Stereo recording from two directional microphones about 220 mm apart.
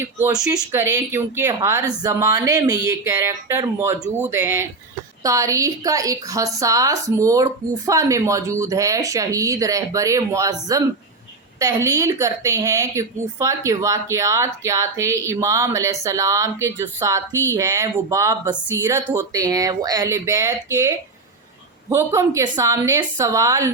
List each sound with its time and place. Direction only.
0.0 s a woman's voice: 10° right (ahead or behind)